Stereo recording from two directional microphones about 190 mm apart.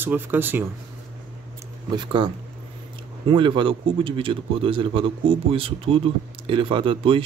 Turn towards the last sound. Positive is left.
turn(degrees=-25)  # may be behind; listen again after turning